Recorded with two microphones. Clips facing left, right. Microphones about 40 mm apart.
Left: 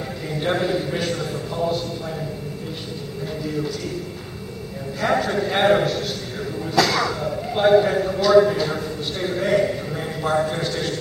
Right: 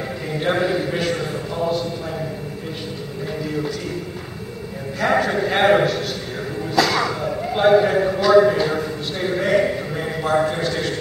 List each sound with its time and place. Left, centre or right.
0.4 s a man's voice: centre
1.1 s horse: right
5.1 s a man's voice: centre
6.8 s a sound: centre
10.3 s a man's voice: centre